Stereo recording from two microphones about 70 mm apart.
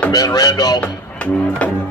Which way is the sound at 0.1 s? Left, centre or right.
Left.